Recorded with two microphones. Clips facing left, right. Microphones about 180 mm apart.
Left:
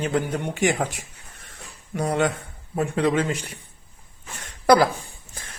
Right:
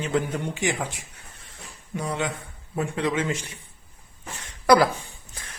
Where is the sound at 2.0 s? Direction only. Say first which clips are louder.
Left 6 dB; 50° left (ahead or behind).